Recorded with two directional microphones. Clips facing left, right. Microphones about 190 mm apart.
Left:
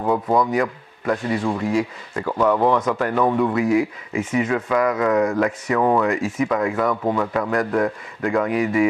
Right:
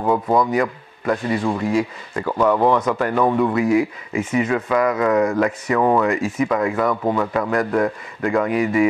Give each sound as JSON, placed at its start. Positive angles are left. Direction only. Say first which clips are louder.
{"t": 0.0, "sound": "a man's voice", "louder": "right 1 dB", "side_deg": -25}
{"t": 3.5, "sound": "speech", "louder": "right 1 dB", "side_deg": -15}
{"t": 7.0, "sound": "speech", "louder": "right 1 dB", "side_deg": -30}